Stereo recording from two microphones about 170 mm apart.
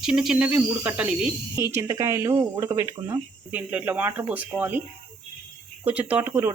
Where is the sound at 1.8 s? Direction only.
20° right (ahead or behind).